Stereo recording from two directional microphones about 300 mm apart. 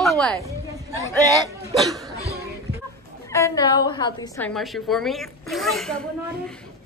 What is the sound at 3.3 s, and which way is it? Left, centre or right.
A woman's voice, centre.